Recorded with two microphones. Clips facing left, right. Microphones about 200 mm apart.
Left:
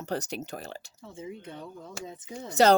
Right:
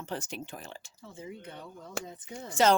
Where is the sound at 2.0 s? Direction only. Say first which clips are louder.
Right 3 dB; 60° right (ahead or behind).